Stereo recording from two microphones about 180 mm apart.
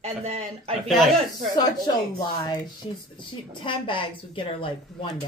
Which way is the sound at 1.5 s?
25° left (ahead or behind).